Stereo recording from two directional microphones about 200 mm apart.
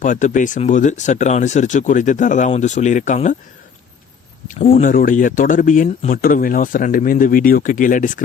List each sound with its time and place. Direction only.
0.0 s speech: 40° left (ahead or behind)
4.4 s speech: 40° left (ahead or behind)